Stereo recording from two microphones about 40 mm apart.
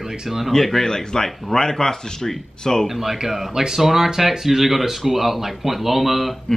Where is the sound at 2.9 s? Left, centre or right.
Centre.